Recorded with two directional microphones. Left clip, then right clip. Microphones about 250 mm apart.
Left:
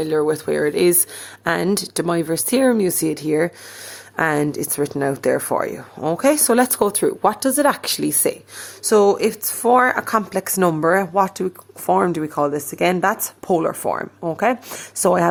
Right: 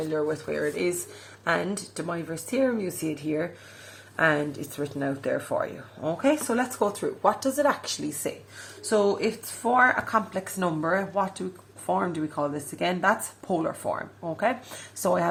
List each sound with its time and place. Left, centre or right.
0.1 s speech: left